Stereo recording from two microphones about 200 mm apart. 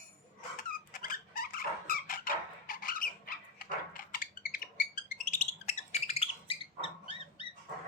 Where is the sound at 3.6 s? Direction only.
45° left (ahead or behind).